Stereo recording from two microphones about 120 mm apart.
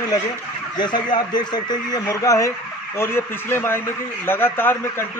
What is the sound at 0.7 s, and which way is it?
Speech, 40° left (ahead or behind).